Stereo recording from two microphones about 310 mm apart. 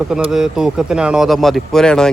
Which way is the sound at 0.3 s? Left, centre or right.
Centre.